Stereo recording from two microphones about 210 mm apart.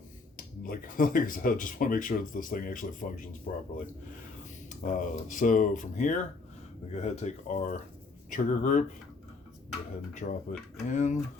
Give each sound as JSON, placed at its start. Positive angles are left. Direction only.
{"t": 0.3, "sound": "speech", "side_deg": 40}
{"t": 4.8, "sound": "speech", "side_deg": 40}
{"t": 10.2, "sound": "speech", "side_deg": 40}